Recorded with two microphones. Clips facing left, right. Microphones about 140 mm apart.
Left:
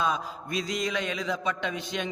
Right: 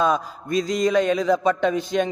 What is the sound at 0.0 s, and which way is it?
A man's voice, 45° right (ahead or behind).